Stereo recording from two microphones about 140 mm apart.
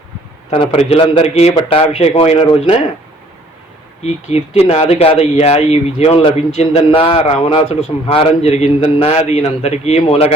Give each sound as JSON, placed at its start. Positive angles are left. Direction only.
{"t": 0.5, "sound": "a man's voice", "side_deg": 40}
{"t": 4.0, "sound": "speech", "side_deg": 45}